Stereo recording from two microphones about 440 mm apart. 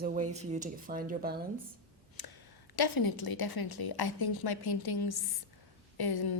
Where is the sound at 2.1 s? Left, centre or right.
Left.